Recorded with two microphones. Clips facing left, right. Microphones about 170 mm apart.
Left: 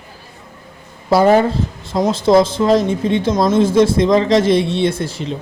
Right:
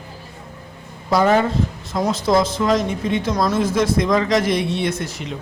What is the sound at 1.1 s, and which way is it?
A woman's voice, 30° left (ahead or behind).